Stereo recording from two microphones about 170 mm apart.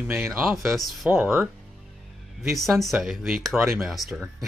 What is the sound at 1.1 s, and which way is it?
Speech, 10° right (ahead or behind).